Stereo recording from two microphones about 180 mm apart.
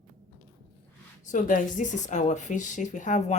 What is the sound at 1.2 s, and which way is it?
Speech, 45° left (ahead or behind).